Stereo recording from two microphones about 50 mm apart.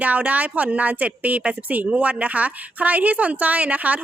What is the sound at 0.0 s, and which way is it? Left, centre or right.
A woman's voice, right.